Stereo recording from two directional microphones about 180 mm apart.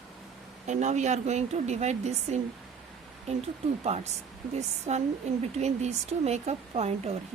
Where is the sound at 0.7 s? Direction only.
40° right (ahead or behind).